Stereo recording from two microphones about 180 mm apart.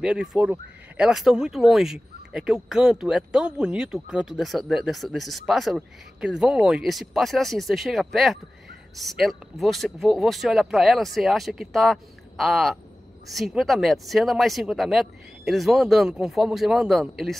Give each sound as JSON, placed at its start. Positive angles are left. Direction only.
{"t": 0.0, "sound": "speech", "side_deg": -5}